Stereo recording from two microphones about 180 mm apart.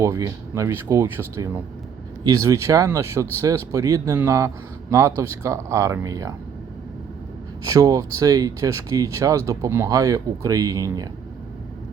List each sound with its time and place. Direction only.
0.0 s speech: 15° right (ahead or behind)
7.6 s speech: 20° right (ahead or behind)